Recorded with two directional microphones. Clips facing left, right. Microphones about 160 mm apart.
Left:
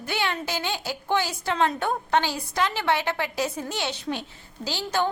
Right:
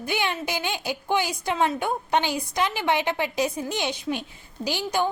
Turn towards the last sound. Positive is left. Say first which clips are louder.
# right 1 dB
turn(degrees=-15)  # may be behind; listen again after turning